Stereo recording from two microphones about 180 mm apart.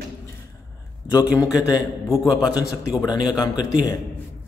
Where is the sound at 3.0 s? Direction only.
25° left (ahead or behind).